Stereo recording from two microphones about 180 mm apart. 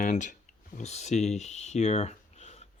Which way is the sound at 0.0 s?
45° left (ahead or behind).